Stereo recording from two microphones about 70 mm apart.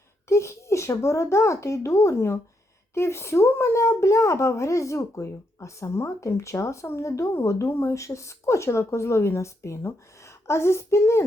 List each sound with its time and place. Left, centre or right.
0.3 s a child's voice: left